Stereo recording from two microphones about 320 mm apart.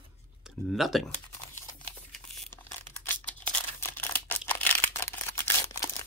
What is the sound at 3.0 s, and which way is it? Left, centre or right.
Tearing, centre.